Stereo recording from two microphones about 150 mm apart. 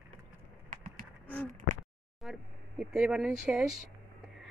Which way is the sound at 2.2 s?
Centre (ahead or behind).